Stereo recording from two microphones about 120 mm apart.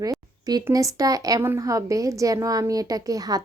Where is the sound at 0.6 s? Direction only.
30° right (ahead or behind).